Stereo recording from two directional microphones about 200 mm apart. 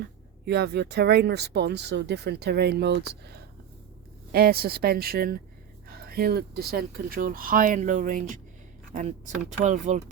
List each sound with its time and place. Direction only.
0.4 s speech: 55° right (ahead or behind); by 10.0 s 35° right (ahead or behind)